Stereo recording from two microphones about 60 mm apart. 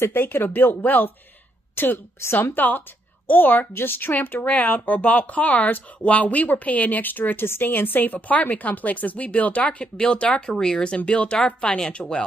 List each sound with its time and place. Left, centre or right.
0.0 s speech: left
1.8 s a woman's voice: left; by 12.2 s centre